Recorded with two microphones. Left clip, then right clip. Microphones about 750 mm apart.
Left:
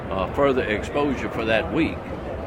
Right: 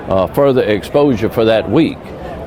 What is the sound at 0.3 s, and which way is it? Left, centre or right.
Speech, right.